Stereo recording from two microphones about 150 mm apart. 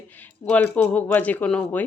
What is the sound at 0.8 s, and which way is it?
A woman's voice, 10° left (ahead or behind).